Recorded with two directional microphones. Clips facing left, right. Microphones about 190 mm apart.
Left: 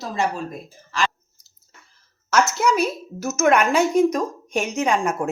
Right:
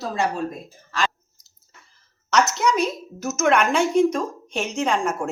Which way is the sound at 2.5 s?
5° left (ahead or behind).